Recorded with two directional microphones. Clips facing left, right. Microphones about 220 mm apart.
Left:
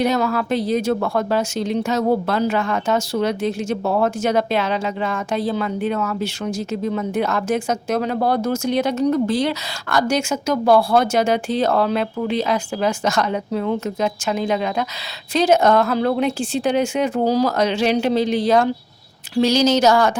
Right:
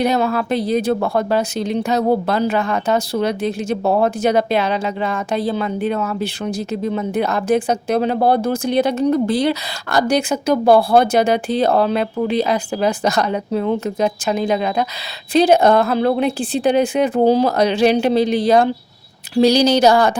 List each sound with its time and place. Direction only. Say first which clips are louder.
0.1 s speech: right 2 dB; 25° right (ahead or behind)
15.9 s speech: right 2 dB; 20° right (ahead or behind)
16.2 s speech: right 3 dB; 35° right (ahead or behind)
18.0 s speech: right 3 dB; 10° right (ahead or behind)
19.4 s speech: right 3 dB; 35° right (ahead or behind)